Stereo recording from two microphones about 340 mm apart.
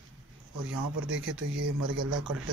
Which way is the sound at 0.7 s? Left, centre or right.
Right.